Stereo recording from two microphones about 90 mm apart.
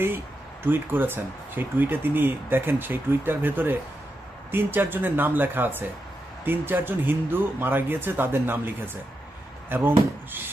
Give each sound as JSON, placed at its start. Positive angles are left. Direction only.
{"t": 0.6, "sound": "speech", "side_deg": -25}